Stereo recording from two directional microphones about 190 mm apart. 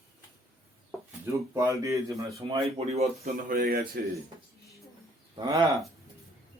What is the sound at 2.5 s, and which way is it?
Speech, 35° right (ahead or behind).